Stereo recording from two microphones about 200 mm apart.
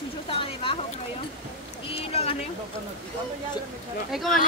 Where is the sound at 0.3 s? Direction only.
25° left (ahead or behind).